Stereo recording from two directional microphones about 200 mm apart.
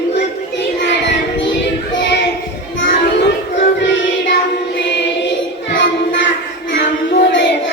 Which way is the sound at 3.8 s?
65° left (ahead or behind).